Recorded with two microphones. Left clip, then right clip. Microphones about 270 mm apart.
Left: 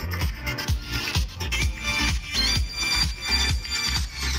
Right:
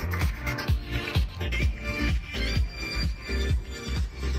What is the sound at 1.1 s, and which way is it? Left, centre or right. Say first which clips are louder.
Music: left 5 dB; left.